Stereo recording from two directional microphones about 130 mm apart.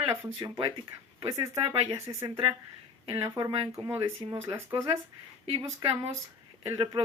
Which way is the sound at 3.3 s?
45° right (ahead or behind).